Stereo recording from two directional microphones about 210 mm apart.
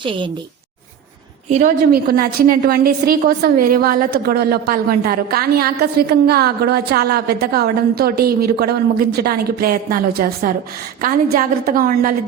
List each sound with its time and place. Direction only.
1.5 s a woman's voice: 40° right (ahead or behind)